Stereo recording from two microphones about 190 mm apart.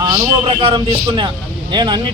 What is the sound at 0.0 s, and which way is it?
Speech, 25° right (ahead or behind).